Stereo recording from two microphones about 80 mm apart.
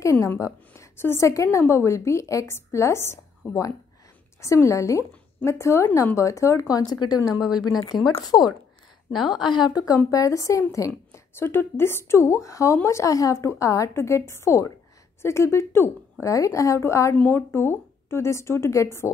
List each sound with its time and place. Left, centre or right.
0.0 s a woman's voice: left
6.7 s speech: left
7.4 s speech: centre
8.2 s speech: left
9.1 s a woman's voice: centre
9.4 s a woman's voice: left
9.7 s speech: left
11.1 s speech: left
17.1 s speech: left